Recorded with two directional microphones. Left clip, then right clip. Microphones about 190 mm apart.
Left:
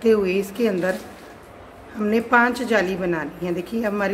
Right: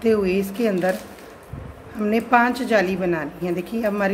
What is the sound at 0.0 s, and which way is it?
Speech, 5° right (ahead or behind).